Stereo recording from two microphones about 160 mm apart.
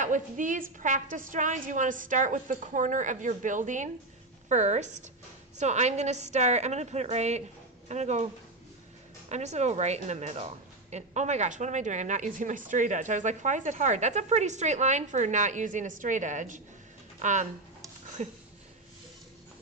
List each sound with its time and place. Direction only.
0.0 s a woman's voice: 55° right (ahead or behind)
9.3 s a woman's voice: 45° right (ahead or behind)